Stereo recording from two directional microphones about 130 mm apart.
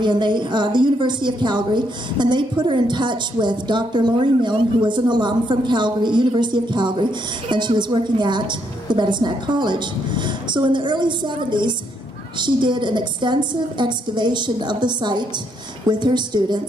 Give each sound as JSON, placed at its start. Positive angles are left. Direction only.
{"t": 0.0, "sound": "a woman's voice", "side_deg": -35}